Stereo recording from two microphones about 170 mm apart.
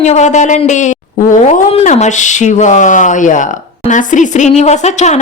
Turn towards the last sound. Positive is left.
turn(degrees=40)  # may be behind; listen again after turning